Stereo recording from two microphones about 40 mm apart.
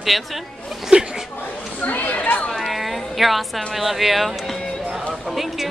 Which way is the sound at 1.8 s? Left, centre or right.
Left.